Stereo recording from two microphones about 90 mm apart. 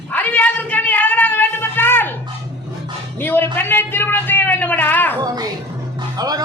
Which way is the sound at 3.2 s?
25° left (ahead or behind).